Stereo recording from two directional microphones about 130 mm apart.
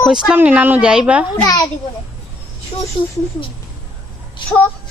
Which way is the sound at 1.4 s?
30° left (ahead or behind).